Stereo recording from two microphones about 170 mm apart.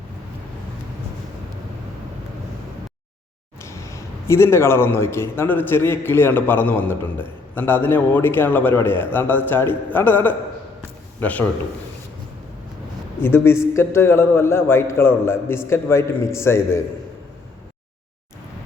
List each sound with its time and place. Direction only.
3.6 s a man's voice: 15° left (ahead or behind)
13.2 s a man's voice: 15° left (ahead or behind)